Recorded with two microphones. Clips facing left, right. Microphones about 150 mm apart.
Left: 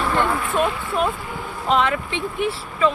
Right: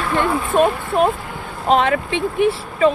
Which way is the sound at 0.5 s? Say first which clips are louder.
Right 5 dB; 45° right (ahead or behind).